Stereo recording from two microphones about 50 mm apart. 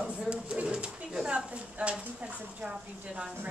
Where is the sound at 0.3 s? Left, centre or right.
Right.